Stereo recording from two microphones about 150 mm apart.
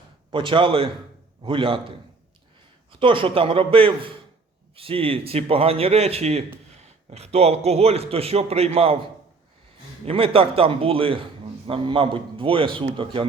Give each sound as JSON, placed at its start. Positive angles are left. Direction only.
{"t": 0.3, "sound": "a man's voice", "side_deg": -35}
{"t": 3.0, "sound": "a man's voice", "side_deg": -35}
{"t": 10.1, "sound": "a man's voice", "side_deg": -40}